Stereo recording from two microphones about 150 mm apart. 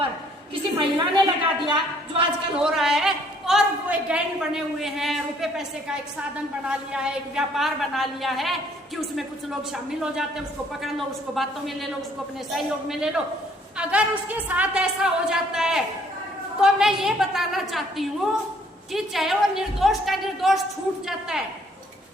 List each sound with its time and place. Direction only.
0.8 s a sound: 35° right (ahead or behind)
2.6 s a woman's voice: 5° right (ahead or behind)
6.7 s a woman's voice: 5° right (ahead or behind)